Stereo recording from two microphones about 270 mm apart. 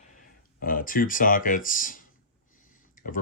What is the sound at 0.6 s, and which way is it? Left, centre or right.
Speech, left.